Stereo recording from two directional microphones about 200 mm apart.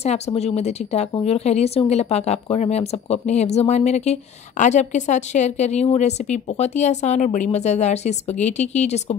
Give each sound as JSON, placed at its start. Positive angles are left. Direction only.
{"t": 0.0, "sound": "speech", "side_deg": 35}